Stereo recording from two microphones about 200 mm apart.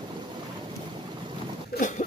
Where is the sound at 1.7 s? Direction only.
40° left (ahead or behind).